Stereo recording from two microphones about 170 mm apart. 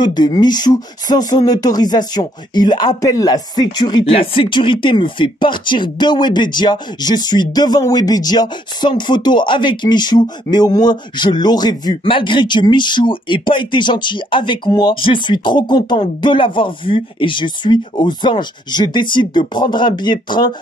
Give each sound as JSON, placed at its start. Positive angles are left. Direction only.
{"t": 0.0, "sound": "speech", "side_deg": 25}